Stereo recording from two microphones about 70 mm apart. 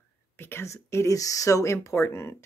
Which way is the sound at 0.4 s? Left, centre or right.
Left.